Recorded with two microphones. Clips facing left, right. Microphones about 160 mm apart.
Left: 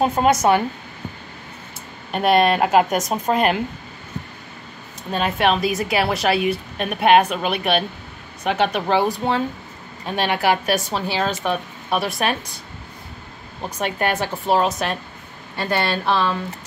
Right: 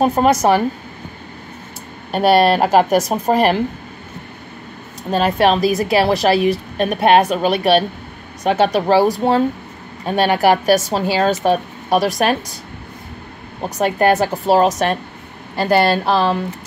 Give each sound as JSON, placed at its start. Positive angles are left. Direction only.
{"t": 0.1, "sound": "a woman's voice", "side_deg": -35}
{"t": 2.1, "sound": "a woman's voice", "side_deg": -35}
{"t": 5.1, "sound": "a woman's voice", "side_deg": -35}
{"t": 13.7, "sound": "a woman's voice", "side_deg": -40}